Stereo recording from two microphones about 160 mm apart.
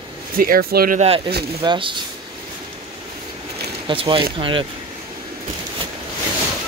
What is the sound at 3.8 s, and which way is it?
Speech, 35° right (ahead or behind).